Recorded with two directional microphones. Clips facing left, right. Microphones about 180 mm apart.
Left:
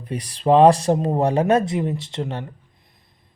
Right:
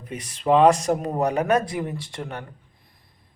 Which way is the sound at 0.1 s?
35° left (ahead or behind).